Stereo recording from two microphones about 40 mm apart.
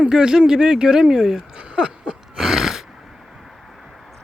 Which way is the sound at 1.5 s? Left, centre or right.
Right.